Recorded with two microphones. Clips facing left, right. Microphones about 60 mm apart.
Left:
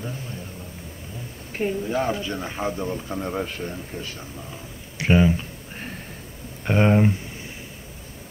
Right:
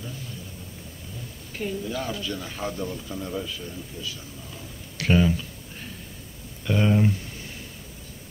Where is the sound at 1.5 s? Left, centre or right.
Left.